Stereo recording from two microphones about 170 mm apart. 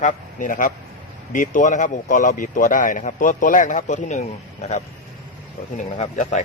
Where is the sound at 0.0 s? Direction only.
50° left (ahead or behind).